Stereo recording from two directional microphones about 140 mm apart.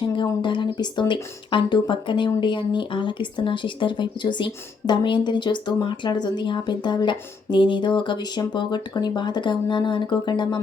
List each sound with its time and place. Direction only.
0.2 s speech: 35° left (ahead or behind)